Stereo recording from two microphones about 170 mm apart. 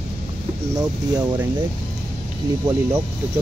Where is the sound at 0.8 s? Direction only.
25° right (ahead or behind).